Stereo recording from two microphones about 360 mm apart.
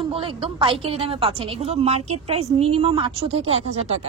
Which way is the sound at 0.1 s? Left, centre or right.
Centre.